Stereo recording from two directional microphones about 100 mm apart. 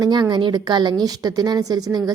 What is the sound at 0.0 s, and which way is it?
A woman's voice, 45° right (ahead or behind).